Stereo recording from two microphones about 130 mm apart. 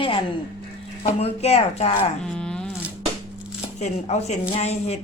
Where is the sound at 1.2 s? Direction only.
55° left (ahead or behind).